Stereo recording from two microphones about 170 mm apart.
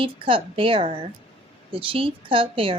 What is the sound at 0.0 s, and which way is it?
Speech, 30° right (ahead or behind).